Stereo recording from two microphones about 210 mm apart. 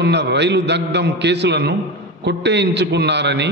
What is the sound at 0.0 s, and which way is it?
A man's voice, 55° right (ahead or behind).